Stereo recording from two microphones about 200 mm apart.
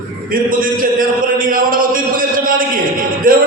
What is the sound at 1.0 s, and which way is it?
Speech, 45° right (ahead or behind).